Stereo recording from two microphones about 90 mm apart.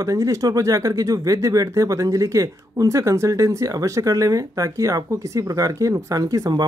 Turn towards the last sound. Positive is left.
turn(degrees=-40)  # may be behind; listen again after turning